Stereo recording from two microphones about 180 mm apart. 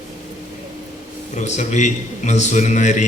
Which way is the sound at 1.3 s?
40° left (ahead or behind).